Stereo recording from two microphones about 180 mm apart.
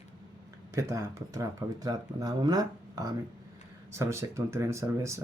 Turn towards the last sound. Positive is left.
turn(degrees=-15)  # may be behind; listen again after turning